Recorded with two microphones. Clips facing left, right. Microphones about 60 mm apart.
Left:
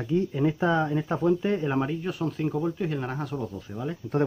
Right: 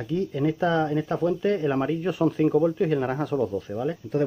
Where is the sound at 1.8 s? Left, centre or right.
Centre.